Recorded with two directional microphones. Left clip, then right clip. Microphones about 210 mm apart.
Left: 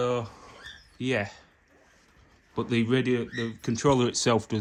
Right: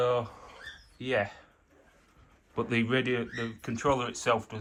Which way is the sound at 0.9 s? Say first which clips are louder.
Left 1 dB; 40° left (ahead or behind).